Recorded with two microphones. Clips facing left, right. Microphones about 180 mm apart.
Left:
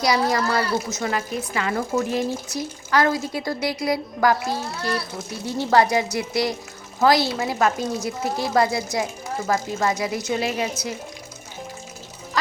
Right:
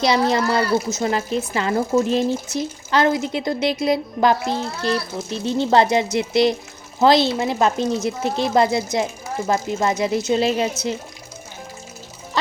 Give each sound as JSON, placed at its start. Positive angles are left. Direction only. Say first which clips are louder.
{"t": 0.0, "sound": "speech", "louder": "right 3 dB", "side_deg": -25}